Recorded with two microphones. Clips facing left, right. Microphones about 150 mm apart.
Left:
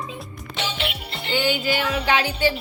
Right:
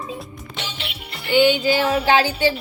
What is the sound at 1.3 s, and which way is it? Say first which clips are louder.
Female singing: right 7 dB; 20° right (ahead or behind).